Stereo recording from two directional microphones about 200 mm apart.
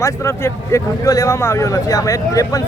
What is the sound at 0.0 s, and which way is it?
Speech, 15° left (ahead or behind).